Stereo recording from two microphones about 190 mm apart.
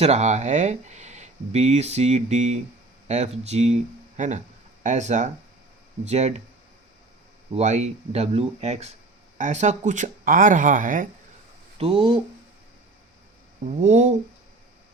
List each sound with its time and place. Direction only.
0.0 s speech: 35° right (ahead or behind)
7.5 s speech: 35° right (ahead or behind)
11.8 s speech: 30° right (ahead or behind)
13.7 s speech: 40° right (ahead or behind)